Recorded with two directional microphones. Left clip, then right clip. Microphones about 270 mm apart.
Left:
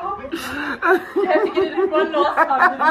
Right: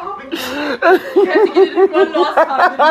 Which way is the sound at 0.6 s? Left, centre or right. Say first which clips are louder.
Right 6 dB; right.